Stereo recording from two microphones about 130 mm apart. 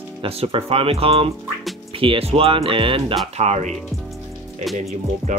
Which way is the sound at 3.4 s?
60° right (ahead or behind).